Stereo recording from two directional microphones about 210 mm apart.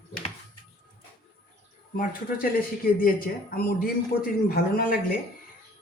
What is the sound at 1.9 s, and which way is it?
Speech, 40° left (ahead or behind).